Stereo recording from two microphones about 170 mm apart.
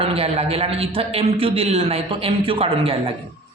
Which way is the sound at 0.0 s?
35° right (ahead or behind).